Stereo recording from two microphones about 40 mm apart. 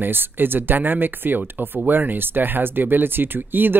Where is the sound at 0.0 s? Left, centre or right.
Right.